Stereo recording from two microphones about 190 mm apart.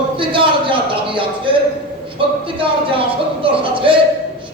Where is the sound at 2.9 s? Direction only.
30° right (ahead or behind).